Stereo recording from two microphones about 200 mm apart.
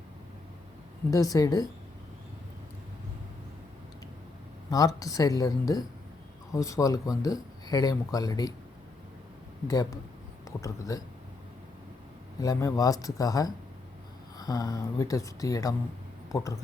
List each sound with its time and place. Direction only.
1.1 s speech: 15° left (ahead or behind)
4.9 s speech: 15° left (ahead or behind)
9.6 s speech: 20° left (ahead or behind)
12.4 s speech: 15° left (ahead or behind)